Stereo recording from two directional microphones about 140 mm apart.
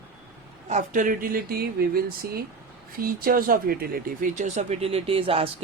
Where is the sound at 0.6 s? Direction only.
60° right (ahead or behind).